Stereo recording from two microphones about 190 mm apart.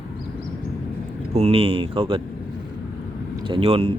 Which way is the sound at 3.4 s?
30° right (ahead or behind).